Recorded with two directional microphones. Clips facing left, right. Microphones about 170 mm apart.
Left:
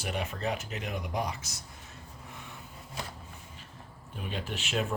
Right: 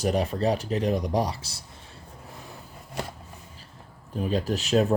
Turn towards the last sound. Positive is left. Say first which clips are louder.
# right 10 dB
turn(degrees=-40)  # may be behind; listen again after turning